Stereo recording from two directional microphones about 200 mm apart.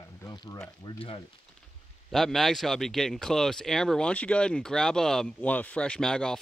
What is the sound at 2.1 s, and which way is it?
A man's voice, centre (ahead or behind).